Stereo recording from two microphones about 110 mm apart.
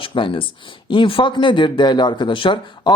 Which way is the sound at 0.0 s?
50° left (ahead or behind).